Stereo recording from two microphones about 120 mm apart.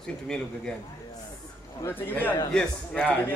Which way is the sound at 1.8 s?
20° left (ahead or behind).